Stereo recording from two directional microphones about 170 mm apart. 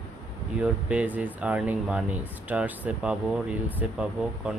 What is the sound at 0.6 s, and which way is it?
Speech, 5° right (ahead or behind).